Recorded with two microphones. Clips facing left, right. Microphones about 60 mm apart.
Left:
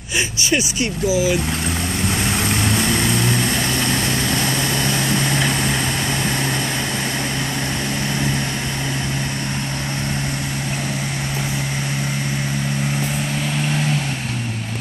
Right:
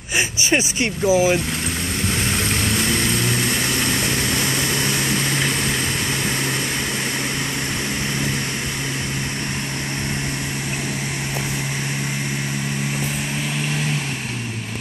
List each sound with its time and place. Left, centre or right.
0.7 s speech: right